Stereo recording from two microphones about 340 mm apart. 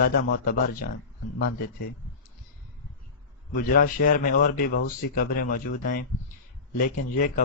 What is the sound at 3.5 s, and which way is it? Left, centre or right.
Speech, left.